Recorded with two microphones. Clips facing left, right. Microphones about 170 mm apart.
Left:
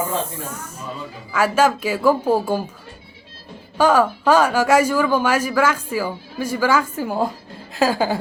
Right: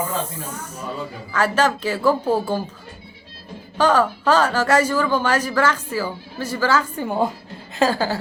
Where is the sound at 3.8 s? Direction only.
10° left (ahead or behind).